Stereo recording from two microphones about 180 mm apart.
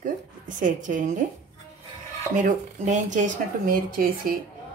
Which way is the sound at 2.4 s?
45° right (ahead or behind).